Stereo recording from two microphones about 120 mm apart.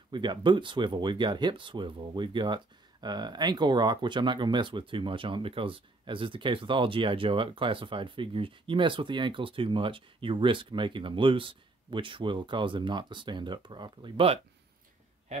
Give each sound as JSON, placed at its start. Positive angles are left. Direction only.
{"t": 0.1, "sound": "speech", "side_deg": -40}